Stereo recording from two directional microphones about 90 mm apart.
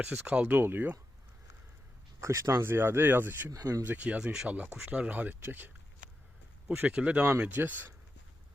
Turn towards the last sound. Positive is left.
turn(degrees=-20)  # may be behind; listen again after turning